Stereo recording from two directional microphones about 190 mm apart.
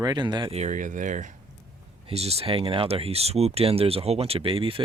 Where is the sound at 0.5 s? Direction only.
40° right (ahead or behind).